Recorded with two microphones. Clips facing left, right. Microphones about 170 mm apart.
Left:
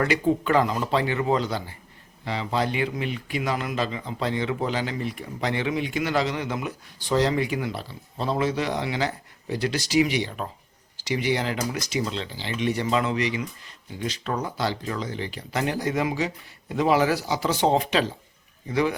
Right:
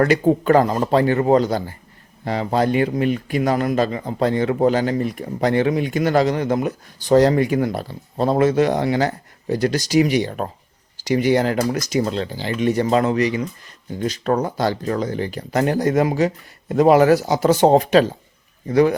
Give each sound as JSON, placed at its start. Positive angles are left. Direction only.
{"t": 0.0, "sound": "speech", "side_deg": -45}